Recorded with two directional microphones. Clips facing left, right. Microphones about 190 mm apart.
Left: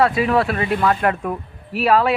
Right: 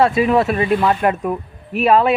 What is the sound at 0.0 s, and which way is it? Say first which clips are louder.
Speech: right 3 dB; 25° right (ahead or behind).